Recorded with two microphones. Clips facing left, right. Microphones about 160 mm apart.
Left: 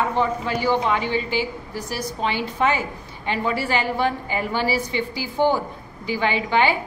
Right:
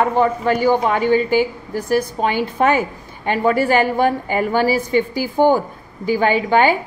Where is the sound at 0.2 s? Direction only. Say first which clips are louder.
Right 6 dB; 50° right (ahead or behind).